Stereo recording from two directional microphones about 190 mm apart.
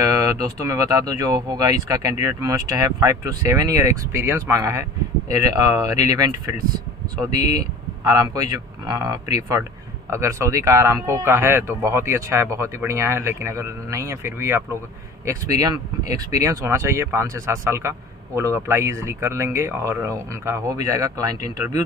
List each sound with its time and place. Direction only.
0.0 s speech: 15° right (ahead or behind)